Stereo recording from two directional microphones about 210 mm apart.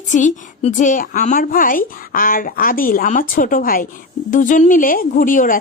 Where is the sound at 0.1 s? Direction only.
35° left (ahead or behind).